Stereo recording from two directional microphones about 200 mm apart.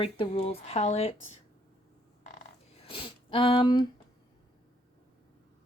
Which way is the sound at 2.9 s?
25° left (ahead or behind).